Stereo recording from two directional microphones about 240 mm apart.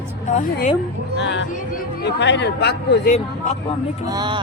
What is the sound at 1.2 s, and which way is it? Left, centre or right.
Speech, left.